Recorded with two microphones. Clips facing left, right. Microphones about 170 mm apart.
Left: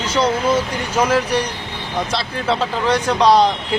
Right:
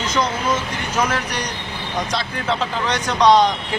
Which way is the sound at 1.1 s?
30° left (ahead or behind).